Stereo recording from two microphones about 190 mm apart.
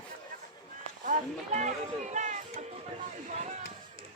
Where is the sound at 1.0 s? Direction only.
40° right (ahead or behind).